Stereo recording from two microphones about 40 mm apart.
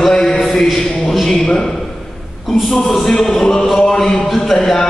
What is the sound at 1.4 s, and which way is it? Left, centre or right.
Speech, centre.